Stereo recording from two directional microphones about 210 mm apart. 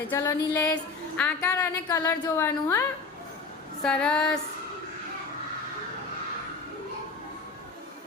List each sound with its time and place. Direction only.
0.1 s a woman's voice: 10° left (ahead or behind)
1.9 s a woman's voice: 20° left (ahead or behind)
3.8 s a woman's voice: 5° left (ahead or behind)